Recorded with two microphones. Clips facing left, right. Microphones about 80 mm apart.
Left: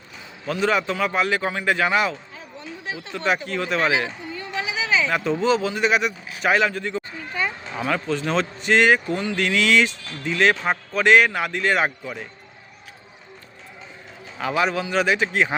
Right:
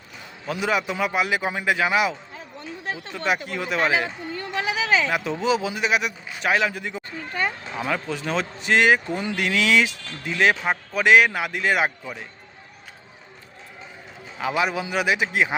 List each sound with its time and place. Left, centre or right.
0.4 s a man's voice: centre
4.3 s a sound: right
5.0 s a man's voice: centre
14.3 s speech: centre